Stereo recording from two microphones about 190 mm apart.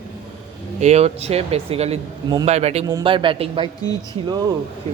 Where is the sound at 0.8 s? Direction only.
35° right (ahead or behind).